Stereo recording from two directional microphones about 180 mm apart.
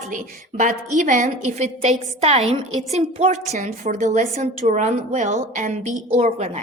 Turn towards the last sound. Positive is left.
turn(degrees=-40)  # may be behind; listen again after turning